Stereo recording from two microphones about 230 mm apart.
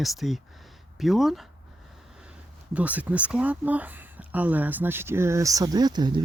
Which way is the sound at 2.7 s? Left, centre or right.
Centre.